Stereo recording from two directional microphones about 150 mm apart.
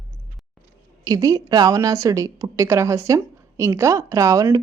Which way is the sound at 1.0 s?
25° right (ahead or behind).